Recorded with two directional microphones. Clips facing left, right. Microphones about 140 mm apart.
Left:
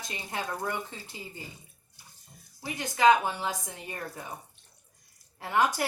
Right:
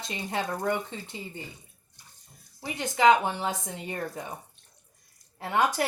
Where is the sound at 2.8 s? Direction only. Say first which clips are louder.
Right 1 dB; 20° right (ahead or behind).